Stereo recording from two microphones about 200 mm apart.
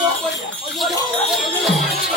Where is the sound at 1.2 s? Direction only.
Centre (ahead or behind).